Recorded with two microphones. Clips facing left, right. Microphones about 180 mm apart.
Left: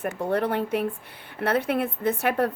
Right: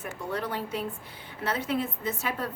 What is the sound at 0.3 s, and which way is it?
A woman's voice, 60° left (ahead or behind).